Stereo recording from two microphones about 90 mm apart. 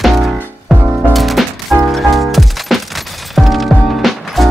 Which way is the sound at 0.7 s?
20° right (ahead or behind).